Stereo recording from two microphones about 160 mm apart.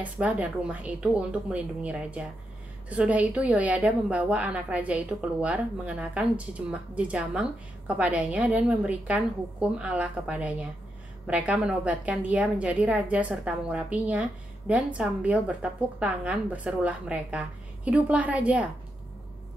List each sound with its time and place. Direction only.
0.0 s a woman's voice: 10° right (ahead or behind)